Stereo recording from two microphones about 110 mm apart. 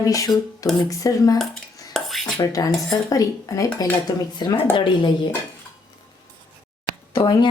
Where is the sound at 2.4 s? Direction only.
35° left (ahead or behind).